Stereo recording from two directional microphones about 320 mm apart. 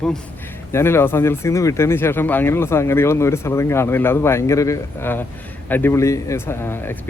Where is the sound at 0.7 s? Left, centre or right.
Centre.